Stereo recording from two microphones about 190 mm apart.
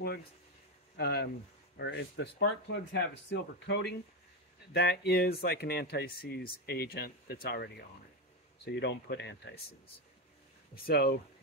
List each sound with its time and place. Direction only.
0.9 s speech: 60° left (ahead or behind)
10.7 s speech: 55° left (ahead or behind)